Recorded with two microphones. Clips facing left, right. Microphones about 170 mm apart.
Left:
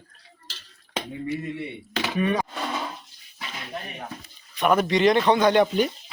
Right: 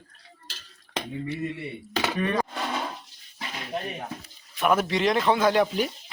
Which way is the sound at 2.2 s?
10° left (ahead or behind).